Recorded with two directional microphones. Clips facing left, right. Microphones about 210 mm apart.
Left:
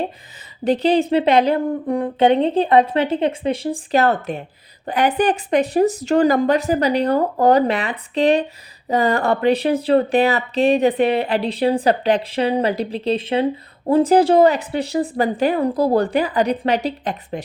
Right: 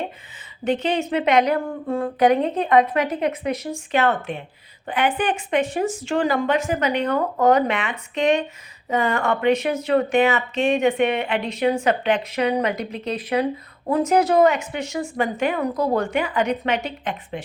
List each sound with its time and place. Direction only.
0.6 s speech: 35° left (ahead or behind)
1.6 s speech: 20° left (ahead or behind); by 17.4 s 35° left (ahead or behind)